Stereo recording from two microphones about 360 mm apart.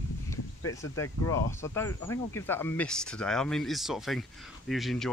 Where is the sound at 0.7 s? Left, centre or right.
Centre.